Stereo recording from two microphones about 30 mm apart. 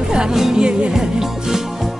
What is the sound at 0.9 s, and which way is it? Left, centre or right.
Music, centre.